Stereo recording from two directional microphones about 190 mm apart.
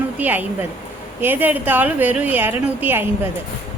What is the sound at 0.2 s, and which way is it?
A woman's voice, 10° right (ahead or behind).